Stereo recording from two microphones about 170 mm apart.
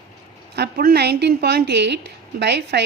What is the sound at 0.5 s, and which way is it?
A woman's voice, 70° right (ahead or behind).